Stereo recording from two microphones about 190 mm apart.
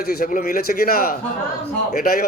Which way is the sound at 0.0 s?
50° left (ahead or behind).